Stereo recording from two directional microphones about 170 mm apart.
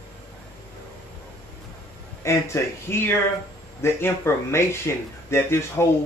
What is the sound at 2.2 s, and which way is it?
Speech, 15° left (ahead or behind).